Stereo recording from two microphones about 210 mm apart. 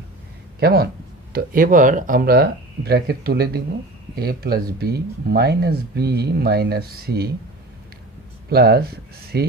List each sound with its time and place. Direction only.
0.6 s speech: 50° right (ahead or behind)
8.5 s speech: 50° right (ahead or behind)